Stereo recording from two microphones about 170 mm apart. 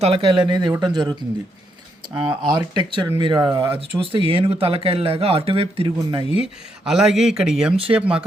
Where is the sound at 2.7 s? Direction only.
25° right (ahead or behind).